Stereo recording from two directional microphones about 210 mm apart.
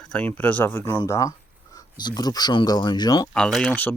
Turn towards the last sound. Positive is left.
turn(degrees=5)  # may be behind; listen again after turning